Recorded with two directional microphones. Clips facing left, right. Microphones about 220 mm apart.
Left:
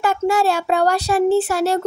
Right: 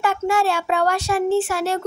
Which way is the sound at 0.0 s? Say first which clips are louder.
Left 3 dB; 40° left (ahead or behind).